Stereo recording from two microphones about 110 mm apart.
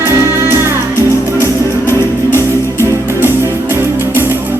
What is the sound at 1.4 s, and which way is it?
Music, 25° left (ahead or behind).